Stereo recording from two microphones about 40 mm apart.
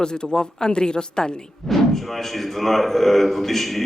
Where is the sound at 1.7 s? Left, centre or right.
Centre.